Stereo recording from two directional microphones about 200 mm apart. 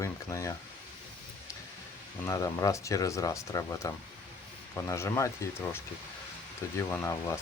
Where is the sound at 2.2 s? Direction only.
15° left (ahead or behind).